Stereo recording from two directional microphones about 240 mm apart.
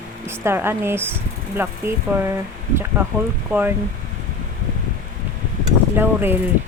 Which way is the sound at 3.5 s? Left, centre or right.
Centre.